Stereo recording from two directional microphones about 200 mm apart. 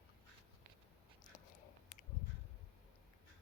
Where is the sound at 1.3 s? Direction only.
40° left (ahead or behind).